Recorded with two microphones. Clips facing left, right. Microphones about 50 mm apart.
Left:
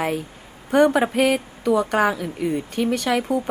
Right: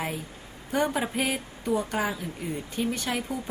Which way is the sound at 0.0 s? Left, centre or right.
Left.